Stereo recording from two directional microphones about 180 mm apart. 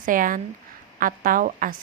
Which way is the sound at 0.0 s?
50° right (ahead or behind).